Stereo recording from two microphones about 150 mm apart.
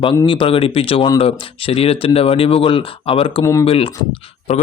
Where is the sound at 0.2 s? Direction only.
35° left (ahead or behind).